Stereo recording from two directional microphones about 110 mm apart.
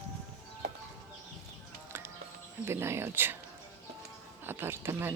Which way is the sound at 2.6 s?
25° right (ahead or behind).